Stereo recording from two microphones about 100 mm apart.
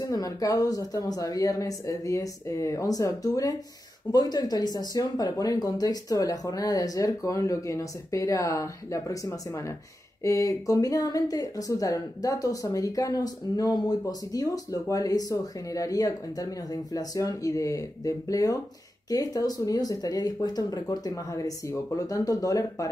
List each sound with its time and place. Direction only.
0.0 s speech: 35° left (ahead or behind)